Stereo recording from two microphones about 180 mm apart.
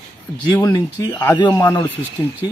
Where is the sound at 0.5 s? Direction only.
20° left (ahead or behind).